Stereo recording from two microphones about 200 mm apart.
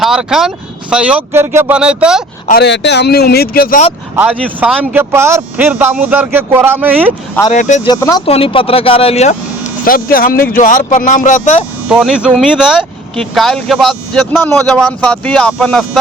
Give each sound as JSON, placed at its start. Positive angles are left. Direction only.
{"t": 0.0, "sound": "speech", "side_deg": -5}
{"t": 2.5, "sound": "speech", "side_deg": 55}
{"t": 4.1, "sound": "speech", "side_deg": -10}
{"t": 7.5, "sound": "speech", "side_deg": 35}
{"t": 7.9, "sound": "speech", "side_deg": 15}
{"t": 8.2, "sound": "speech", "side_deg": 30}
{"t": 11.9, "sound": "speech", "side_deg": -5}